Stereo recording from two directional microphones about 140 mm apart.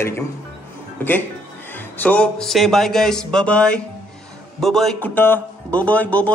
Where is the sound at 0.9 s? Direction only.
15° left (ahead or behind).